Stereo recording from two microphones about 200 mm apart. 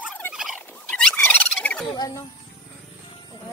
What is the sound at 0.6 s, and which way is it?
Turkey, 5° left (ahead or behind).